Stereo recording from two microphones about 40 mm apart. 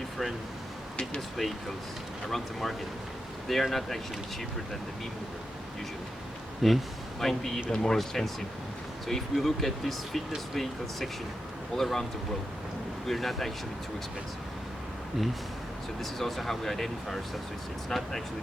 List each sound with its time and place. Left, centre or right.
1.4 s speech: centre
6.6 s speech: centre
7.9 s speech: centre
13.1 s speech: centre
16.1 s speech: centre